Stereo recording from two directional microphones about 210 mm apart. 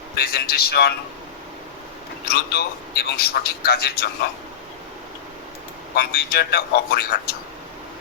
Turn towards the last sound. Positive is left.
turn(degrees=50)  # may be behind; listen again after turning